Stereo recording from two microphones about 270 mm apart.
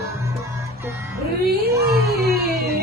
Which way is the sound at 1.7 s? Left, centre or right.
Centre.